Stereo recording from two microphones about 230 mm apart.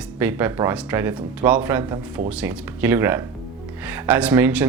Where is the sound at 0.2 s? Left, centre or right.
Centre.